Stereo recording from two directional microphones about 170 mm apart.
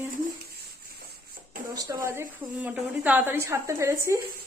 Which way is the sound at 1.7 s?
20° right (ahead or behind).